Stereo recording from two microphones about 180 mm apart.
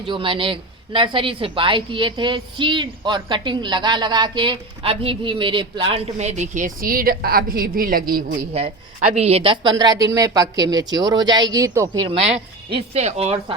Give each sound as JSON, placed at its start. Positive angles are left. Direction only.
{"t": 0.0, "sound": "a woman's voice", "side_deg": -30}
{"t": 8.5, "sound": "a woman's voice", "side_deg": -35}
{"t": 12.0, "sound": "speech", "side_deg": -35}